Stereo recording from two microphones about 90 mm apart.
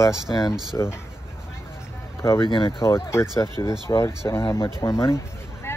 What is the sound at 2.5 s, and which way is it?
Speech, 65° left (ahead or behind).